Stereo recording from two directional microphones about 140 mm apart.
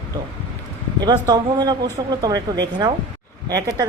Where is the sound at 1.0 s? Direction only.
30° right (ahead or behind).